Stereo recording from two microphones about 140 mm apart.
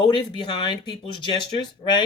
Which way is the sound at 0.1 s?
35° left (ahead or behind).